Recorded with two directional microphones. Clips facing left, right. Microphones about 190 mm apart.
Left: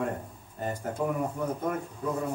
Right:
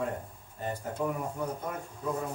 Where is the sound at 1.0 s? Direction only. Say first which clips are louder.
Left 2 dB; 50° left (ahead or behind).